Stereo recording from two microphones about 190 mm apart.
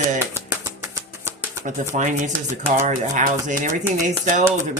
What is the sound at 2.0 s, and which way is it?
Speech, 40° right (ahead or behind).